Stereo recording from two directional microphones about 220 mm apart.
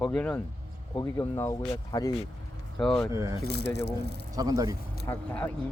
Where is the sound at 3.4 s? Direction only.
50° left (ahead or behind).